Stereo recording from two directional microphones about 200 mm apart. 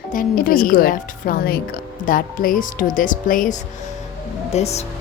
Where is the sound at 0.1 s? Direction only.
45° left (ahead or behind).